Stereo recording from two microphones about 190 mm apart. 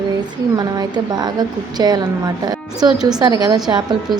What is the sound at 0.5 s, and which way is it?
Speech, 20° right (ahead or behind).